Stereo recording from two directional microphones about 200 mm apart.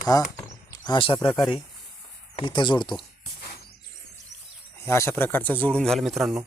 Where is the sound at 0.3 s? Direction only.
20° left (ahead or behind).